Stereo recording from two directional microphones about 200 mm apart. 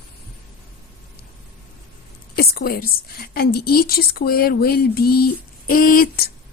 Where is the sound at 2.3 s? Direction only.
50° left (ahead or behind).